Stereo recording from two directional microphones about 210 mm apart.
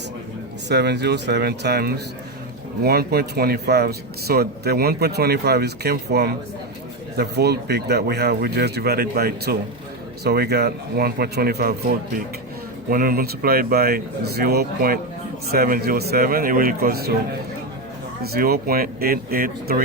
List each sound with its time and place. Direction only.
0.7 s speech: 55° right (ahead or behind)
18.2 s speech: 45° right (ahead or behind)